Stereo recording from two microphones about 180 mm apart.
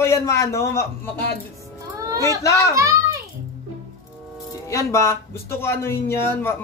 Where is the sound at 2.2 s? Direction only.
15° left (ahead or behind).